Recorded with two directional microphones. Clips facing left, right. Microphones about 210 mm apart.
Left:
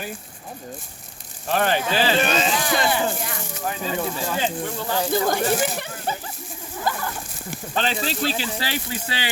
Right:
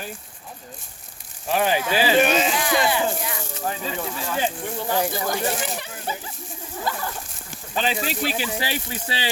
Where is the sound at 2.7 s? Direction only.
45° left (ahead or behind).